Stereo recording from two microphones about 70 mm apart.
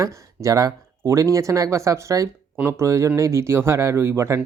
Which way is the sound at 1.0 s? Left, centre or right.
Right.